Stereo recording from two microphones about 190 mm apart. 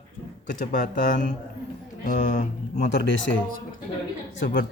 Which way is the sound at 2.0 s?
45° left (ahead or behind).